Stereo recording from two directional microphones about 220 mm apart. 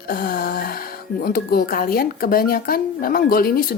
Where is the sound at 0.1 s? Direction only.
40° left (ahead or behind).